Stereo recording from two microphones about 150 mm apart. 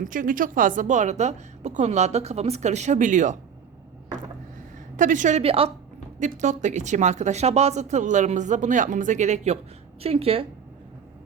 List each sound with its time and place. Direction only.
0.0 s speech: 65° right (ahead or behind)
4.9 s a woman's voice: 60° right (ahead or behind)
5.4 s speech: 40° right (ahead or behind)
6.1 s speech: 55° right (ahead or behind)